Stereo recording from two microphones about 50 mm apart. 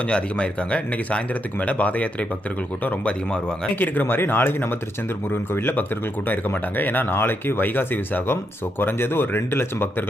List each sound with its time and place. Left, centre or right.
0.1 s speech: left
3.8 s speech: left